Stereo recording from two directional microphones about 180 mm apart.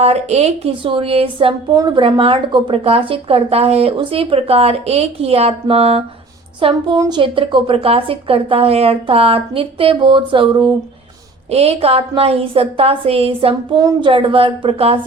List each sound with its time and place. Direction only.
0.0 s speech: 35° right (ahead or behind)
1.7 s a woman's voice: 20° right (ahead or behind)
2.0 s a woman's voice: 30° right (ahead or behind)